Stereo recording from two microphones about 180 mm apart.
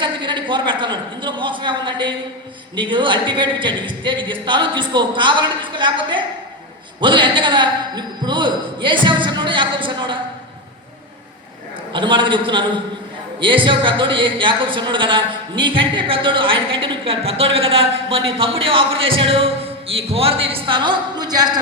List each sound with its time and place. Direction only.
0.0 s a man's voice: 25° right (ahead or behind)
11.9 s a man's voice: 25° right (ahead or behind)